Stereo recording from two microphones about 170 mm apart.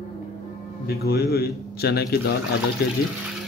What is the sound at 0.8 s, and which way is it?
A man's voice, 70° left (ahead or behind).